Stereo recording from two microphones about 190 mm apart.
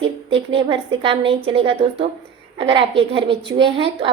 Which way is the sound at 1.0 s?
30° right (ahead or behind).